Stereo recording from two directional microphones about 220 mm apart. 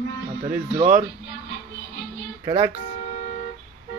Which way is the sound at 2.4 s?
25° right (ahead or behind).